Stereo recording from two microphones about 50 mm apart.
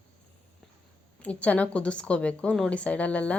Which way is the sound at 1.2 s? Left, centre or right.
Left.